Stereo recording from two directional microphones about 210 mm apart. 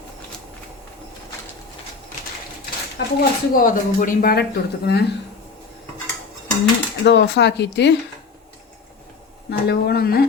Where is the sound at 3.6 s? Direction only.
40° left (ahead or behind).